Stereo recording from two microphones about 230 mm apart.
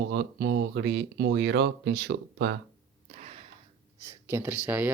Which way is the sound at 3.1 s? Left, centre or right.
Right.